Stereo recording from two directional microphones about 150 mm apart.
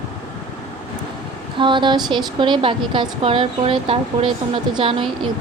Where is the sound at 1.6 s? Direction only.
35° right (ahead or behind).